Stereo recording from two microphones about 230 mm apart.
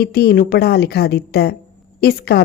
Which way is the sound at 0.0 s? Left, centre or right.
Left.